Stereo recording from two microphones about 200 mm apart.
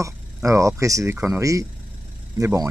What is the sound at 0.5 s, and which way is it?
Speech, 15° right (ahead or behind).